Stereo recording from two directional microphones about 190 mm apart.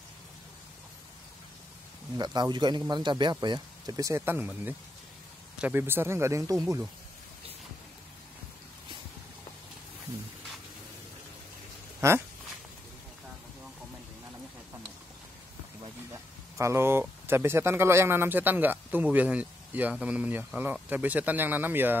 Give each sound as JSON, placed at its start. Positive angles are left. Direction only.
{"t": 2.1, "sound": "speech", "side_deg": -20}
{"t": 12.0, "sound": "speech", "side_deg": -15}
{"t": 16.1, "sound": "speech", "side_deg": -15}